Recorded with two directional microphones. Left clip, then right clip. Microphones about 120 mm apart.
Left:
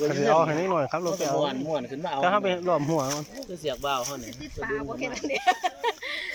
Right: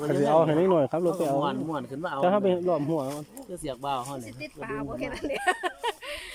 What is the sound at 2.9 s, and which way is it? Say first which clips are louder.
Speech: left 3 dB; 20° right (ahead or behind).